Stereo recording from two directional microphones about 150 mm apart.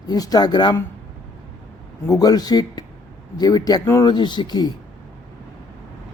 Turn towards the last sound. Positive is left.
turn(degrees=25)  # may be behind; listen again after turning